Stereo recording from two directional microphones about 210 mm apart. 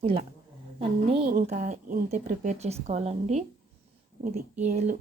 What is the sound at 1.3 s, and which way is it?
Speech, 40° right (ahead or behind).